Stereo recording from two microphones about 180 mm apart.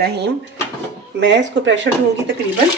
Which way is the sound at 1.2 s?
85° right.